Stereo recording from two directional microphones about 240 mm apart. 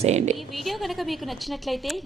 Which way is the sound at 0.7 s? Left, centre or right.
Centre.